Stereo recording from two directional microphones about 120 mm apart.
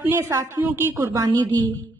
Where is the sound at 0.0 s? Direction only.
15° right (ahead or behind).